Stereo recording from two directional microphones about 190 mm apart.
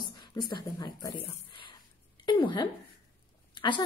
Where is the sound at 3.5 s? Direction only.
25° left (ahead or behind).